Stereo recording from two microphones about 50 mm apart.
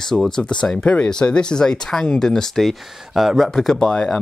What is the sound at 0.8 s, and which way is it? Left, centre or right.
Speech, left.